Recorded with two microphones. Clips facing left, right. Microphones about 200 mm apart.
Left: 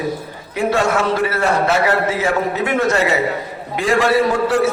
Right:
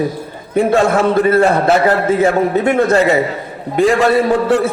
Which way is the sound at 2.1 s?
55° right (ahead or behind).